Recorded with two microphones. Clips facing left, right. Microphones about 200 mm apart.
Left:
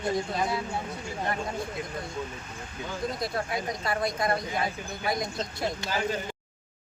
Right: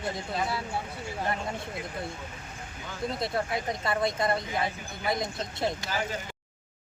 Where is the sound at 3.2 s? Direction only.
25° right (ahead or behind).